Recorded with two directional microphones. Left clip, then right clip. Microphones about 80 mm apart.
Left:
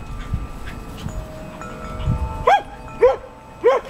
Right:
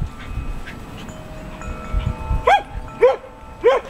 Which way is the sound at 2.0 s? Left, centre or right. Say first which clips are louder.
Left 1 dB; centre.